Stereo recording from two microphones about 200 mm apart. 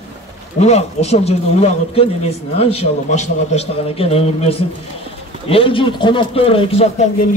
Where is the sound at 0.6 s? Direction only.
35° left (ahead or behind).